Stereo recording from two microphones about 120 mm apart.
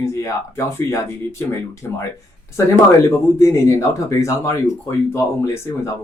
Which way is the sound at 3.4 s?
25° left (ahead or behind).